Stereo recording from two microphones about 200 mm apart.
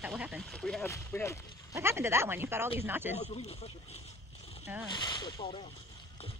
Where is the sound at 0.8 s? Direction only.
15° left (ahead or behind).